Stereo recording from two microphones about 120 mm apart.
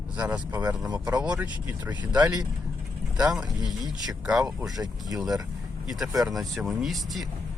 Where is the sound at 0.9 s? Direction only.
35° right (ahead or behind).